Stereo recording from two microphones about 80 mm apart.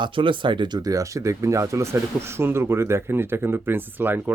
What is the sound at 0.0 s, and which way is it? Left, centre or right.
Speech, right.